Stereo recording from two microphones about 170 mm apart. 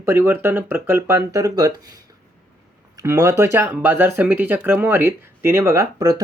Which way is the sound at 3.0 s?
15° right (ahead or behind).